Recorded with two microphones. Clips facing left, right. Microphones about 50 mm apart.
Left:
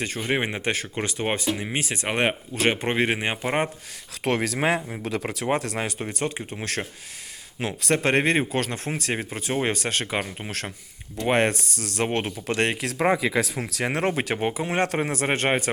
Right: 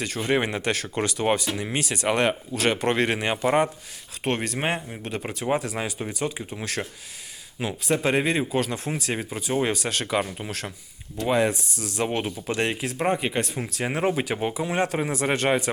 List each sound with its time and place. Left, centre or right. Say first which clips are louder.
0.0 s speech: right 1 dB; left
4.2 s speech: left 3 dB; left
7.6 s speech: left 1 dB; left
11.3 s speech: left 1 dB; left
13.6 s speech: left 1 dB; left